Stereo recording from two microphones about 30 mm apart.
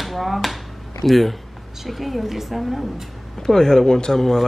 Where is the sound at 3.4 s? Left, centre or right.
Centre.